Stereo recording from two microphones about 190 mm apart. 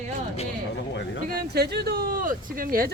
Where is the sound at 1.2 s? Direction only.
55° right (ahead or behind).